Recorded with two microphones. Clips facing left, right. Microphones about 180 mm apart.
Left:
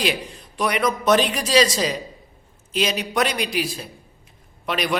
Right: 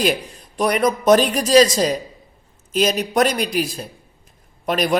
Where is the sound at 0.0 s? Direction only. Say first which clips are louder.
Right 4 dB; 45° right (ahead or behind).